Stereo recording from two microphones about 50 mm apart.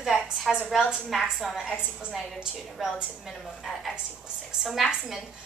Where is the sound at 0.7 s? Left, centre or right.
Centre.